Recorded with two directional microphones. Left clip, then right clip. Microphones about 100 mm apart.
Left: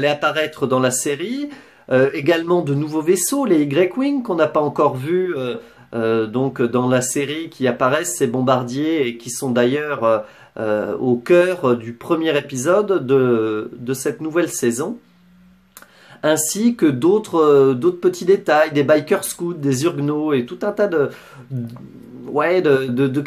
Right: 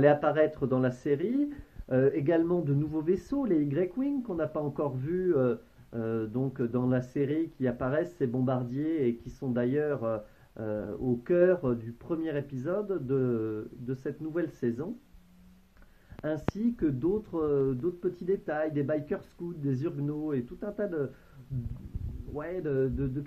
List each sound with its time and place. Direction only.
0.0 s speech: 25° left (ahead or behind)
16.8 s speech: 30° left (ahead or behind)
22.4 s speech: 30° left (ahead or behind)